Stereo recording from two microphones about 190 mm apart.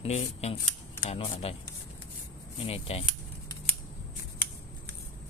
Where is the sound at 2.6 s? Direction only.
30° left (ahead or behind).